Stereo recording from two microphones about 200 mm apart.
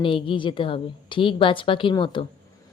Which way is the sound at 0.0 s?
25° left (ahead or behind).